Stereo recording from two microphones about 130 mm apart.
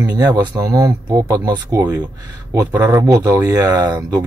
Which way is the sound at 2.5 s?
20° right (ahead or behind).